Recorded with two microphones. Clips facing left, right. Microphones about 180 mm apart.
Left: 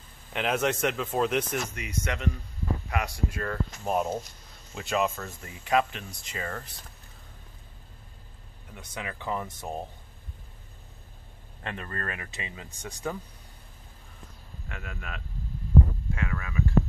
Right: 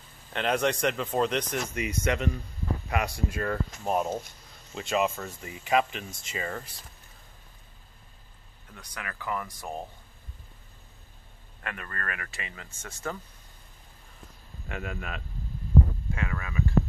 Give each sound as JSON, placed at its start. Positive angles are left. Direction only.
{"t": 0.3, "sound": "speech", "side_deg": 5}
{"t": 1.8, "sound": "speech", "side_deg": -10}
{"t": 3.8, "sound": "speech", "side_deg": 0}
{"t": 8.7, "sound": "speech", "side_deg": 25}
{"t": 11.6, "sound": "speech", "side_deg": 25}
{"t": 14.7, "sound": "speech", "side_deg": -25}